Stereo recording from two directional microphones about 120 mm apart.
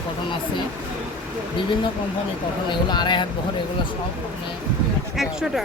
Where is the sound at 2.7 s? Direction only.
40° left (ahead or behind).